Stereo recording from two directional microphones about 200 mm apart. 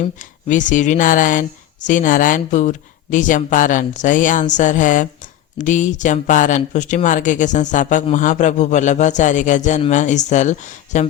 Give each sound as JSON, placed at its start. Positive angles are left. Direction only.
{"t": 0.0, "sound": "speech", "side_deg": 40}